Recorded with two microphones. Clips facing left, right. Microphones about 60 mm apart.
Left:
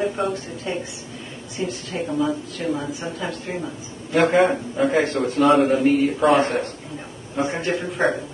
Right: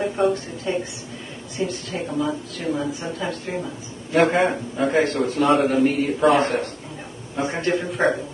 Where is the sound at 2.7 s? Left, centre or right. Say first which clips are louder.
Right 2 dB; centre.